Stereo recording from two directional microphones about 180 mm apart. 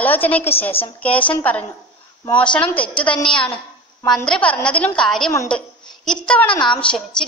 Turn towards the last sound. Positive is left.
turn(degrees=5)  # may be behind; listen again after turning